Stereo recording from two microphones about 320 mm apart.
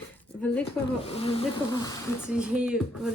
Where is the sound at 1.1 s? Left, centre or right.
Centre.